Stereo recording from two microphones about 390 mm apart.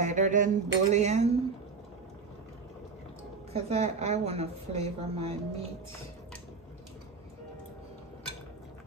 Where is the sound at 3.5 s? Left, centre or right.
Centre.